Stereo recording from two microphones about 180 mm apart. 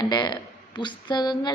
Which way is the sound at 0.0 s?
20° left (ahead or behind).